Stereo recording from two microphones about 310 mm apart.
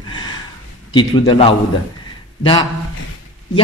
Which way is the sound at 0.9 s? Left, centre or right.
Centre.